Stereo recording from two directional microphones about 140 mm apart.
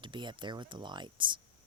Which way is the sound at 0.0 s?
35° right (ahead or behind).